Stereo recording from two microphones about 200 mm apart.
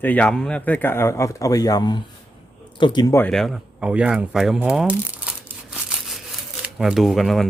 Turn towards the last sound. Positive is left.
turn(degrees=0)  # may be behind; listen again after turning